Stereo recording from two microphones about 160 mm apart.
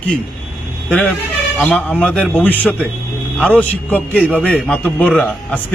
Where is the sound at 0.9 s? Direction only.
10° left (ahead or behind).